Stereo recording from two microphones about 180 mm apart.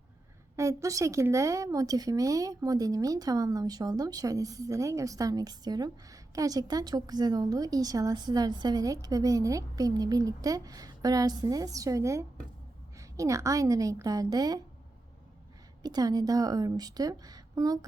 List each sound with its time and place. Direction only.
0.5 s a woman's voice: 15° right (ahead or behind)
15.8 s a woman's voice: 20° right (ahead or behind)